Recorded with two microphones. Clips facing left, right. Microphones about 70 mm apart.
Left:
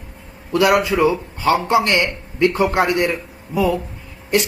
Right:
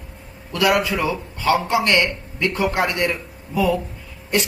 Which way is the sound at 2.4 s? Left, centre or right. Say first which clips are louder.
Left 5 dB; left.